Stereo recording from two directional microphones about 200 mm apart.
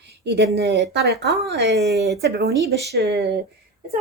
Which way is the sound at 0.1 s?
55° right (ahead or behind).